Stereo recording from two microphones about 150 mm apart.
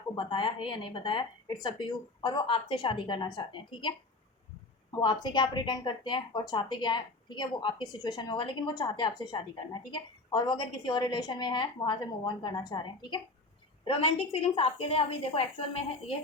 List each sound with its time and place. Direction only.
0.2 s a woman's voice: 35° left (ahead or behind)
4.9 s a woman's voice: 30° left (ahead or behind)